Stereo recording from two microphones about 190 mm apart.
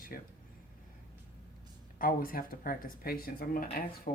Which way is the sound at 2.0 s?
45° left (ahead or behind).